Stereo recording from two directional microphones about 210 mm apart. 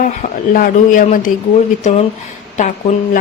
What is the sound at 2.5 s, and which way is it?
Speech, 35° left (ahead or behind).